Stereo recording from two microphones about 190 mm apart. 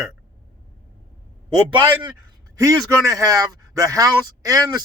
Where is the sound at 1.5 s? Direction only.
25° right (ahead or behind).